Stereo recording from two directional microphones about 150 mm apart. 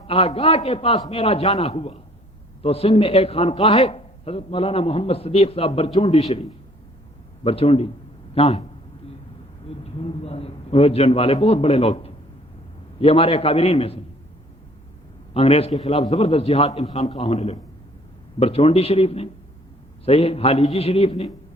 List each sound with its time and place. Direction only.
0.1 s a man's voice: 40° left (ahead or behind)
9.6 s a sound: 40° left (ahead or behind)
13.0 s a man's voice: 40° left (ahead or behind)
15.3 s a man's voice: 40° left (ahead or behind)
16.0 s a man's voice: 25° left (ahead or behind)
16.3 s a man's voice: 45° left (ahead or behind)